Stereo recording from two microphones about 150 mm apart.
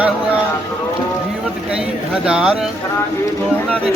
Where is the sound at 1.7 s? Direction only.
5° right (ahead or behind).